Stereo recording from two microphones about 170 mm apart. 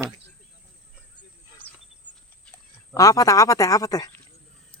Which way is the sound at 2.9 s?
20° left (ahead or behind).